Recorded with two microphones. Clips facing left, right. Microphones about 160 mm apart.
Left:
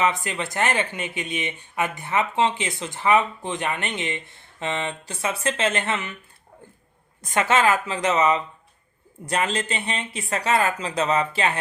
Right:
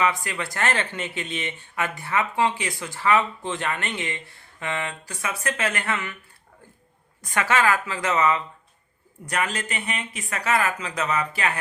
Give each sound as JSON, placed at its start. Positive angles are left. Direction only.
{"t": 0.0, "sound": "speech", "side_deg": 20}
{"t": 7.2, "sound": "speech", "side_deg": 20}